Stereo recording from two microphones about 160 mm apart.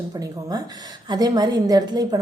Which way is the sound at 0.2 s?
20° right (ahead or behind).